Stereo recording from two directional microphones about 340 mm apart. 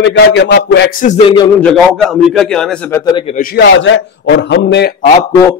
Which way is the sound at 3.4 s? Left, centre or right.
Left.